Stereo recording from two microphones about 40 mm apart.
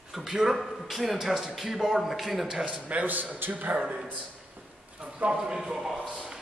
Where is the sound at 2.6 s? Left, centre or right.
Right.